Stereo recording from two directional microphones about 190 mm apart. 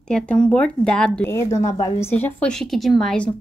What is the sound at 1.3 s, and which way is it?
A woman's voice, 15° left (ahead or behind).